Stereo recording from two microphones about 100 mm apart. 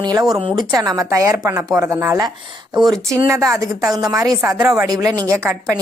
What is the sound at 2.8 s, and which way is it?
A woman's voice, 35° right (ahead or behind).